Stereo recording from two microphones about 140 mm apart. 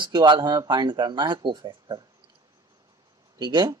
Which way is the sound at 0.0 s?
30° right (ahead or behind).